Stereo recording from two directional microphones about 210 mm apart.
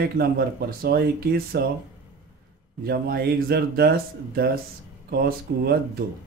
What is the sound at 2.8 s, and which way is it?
A man's voice, 50° right (ahead or behind).